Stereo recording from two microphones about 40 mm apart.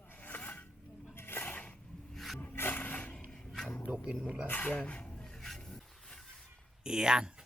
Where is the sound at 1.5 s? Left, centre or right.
Left.